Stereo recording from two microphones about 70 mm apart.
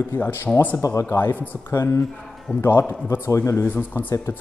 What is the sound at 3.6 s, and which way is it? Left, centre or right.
Speech, left.